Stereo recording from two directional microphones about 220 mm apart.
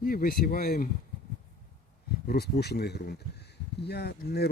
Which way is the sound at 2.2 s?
45° left (ahead or behind).